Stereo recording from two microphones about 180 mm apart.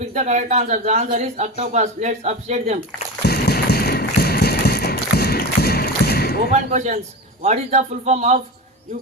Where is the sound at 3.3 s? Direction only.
65° left (ahead or behind).